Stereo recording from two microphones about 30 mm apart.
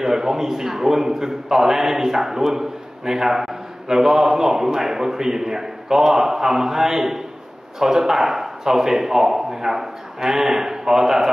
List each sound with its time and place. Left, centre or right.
0.0 s a man's voice: centre